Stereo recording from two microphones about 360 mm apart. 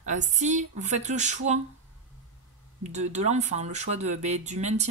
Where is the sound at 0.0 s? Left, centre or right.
Centre.